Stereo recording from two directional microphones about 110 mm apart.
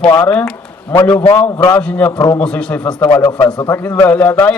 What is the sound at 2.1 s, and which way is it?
Speech, 35° left (ahead or behind).